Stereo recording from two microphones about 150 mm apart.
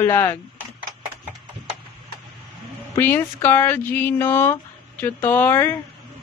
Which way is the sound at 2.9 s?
15° left (ahead or behind).